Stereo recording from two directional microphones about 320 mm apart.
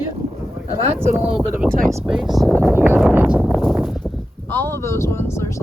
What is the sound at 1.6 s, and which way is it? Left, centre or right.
Speech, centre.